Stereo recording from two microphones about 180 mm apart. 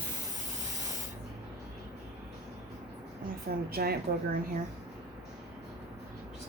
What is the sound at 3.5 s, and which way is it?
Speech, 60° right (ahead or behind).